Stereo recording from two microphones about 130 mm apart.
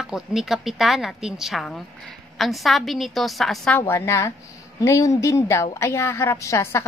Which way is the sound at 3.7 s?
20° left (ahead or behind).